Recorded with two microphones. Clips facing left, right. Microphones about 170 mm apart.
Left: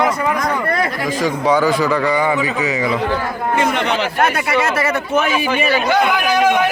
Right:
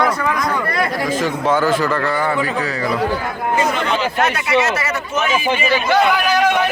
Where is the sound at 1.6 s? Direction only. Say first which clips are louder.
Left 2 dB; 15° left (ahead or behind).